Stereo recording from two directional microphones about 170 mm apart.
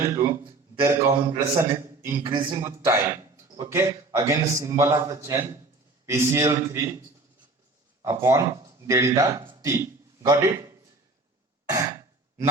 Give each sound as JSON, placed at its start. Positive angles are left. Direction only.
{"t": 0.0, "sound": "a man's voice", "side_deg": -15}
{"t": 8.0, "sound": "a man's voice", "side_deg": -15}
{"t": 9.4, "sound": "a sound", "side_deg": -30}
{"t": 9.6, "sound": "a man's voice", "side_deg": -20}